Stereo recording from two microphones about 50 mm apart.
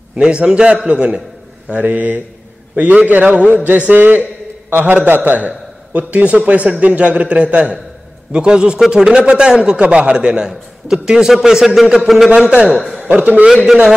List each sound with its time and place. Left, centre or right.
0.2 s a man's voice: centre
1.7 s a man's voice: right
12.7 s a man's voice: centre
13.0 s a man's voice: right